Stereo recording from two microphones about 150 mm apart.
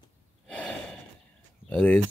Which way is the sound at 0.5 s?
5° left (ahead or behind).